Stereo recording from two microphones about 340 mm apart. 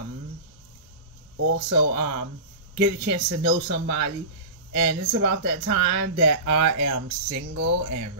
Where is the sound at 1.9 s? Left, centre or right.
Right.